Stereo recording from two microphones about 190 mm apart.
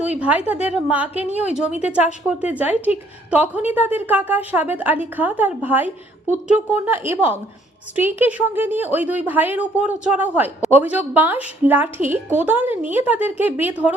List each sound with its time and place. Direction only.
0.1 s a woman's voice: 5° right (ahead or behind)